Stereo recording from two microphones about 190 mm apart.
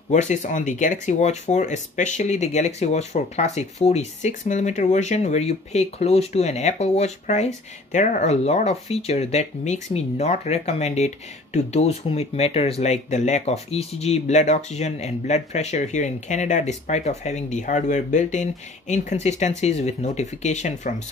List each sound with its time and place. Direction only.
0.1 s speech: 40° left (ahead or behind)